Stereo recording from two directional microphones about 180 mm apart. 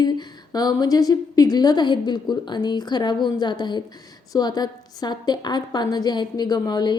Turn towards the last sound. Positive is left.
turn(degrees=25)  # may be behind; listen again after turning